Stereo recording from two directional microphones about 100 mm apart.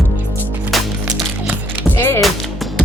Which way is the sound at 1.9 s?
25° left (ahead or behind).